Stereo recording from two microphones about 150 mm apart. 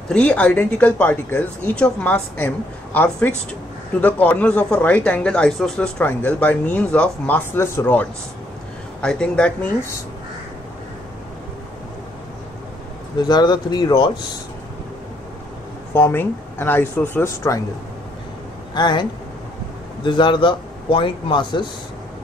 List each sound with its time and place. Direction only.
0.1 s speech: 5° left (ahead or behind)
13.2 s speech: 30° left (ahead or behind)
15.9 s speech: 15° left (ahead or behind)
18.8 s speech: 30° left (ahead or behind)